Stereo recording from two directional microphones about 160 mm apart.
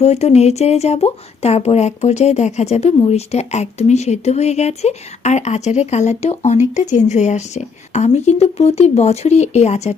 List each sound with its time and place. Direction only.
0.0 s speech: 45° left (ahead or behind)